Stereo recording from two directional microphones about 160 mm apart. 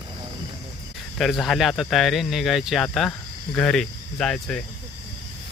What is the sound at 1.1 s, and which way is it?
Speech, centre (ahead or behind).